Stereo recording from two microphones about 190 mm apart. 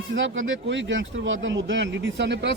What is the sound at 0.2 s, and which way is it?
Speech, 90° right.